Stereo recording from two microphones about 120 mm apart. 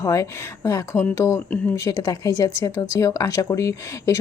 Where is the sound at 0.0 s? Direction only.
25° left (ahead or behind).